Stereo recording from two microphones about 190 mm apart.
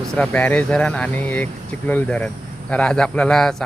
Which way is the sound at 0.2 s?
5° left (ahead or behind).